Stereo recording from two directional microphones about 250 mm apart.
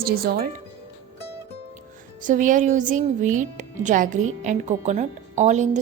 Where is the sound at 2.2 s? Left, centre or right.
Right.